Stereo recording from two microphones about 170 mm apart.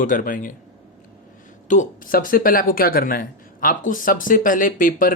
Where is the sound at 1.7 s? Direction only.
50° left (ahead or behind).